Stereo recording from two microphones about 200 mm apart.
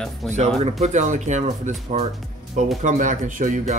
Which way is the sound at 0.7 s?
35° right (ahead or behind).